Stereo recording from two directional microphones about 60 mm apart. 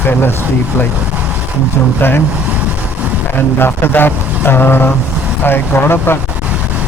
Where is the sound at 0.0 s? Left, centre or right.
Left.